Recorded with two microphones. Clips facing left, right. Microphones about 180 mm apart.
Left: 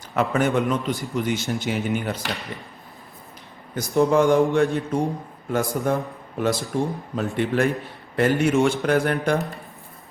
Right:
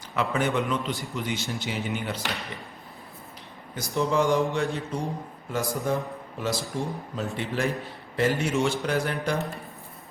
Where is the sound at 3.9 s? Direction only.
55° left (ahead or behind).